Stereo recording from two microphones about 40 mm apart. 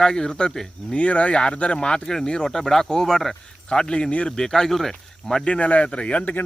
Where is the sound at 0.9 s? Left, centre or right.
Left.